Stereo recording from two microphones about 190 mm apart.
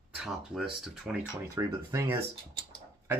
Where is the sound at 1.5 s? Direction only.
15° right (ahead or behind).